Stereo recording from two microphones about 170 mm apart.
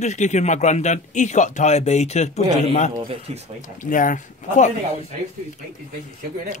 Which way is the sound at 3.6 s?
50° left (ahead or behind).